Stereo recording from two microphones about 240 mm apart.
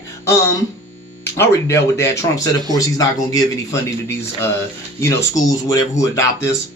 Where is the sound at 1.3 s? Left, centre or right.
Centre.